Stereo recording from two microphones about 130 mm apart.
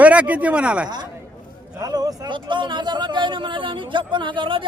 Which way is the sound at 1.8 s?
30° right (ahead or behind).